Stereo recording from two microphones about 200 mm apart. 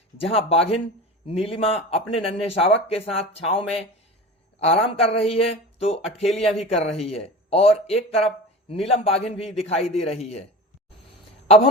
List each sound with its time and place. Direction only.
0.2 s a man's voice: 30° left (ahead or behind)